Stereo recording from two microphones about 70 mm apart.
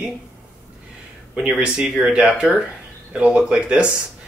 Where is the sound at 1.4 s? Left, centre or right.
Centre.